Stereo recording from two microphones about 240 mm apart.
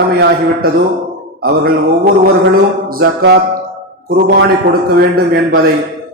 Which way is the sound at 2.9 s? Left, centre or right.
Right.